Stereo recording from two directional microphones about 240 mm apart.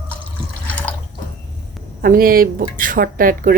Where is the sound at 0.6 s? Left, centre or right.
Centre.